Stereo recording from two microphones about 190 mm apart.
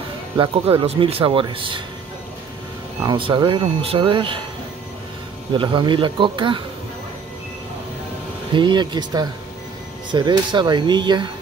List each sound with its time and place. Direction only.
0.4 s speech: 30° right (ahead or behind)
3.1 s speech: 25° right (ahead or behind)
5.6 s speech: 25° right (ahead or behind)
8.5 s speech: 25° right (ahead or behind)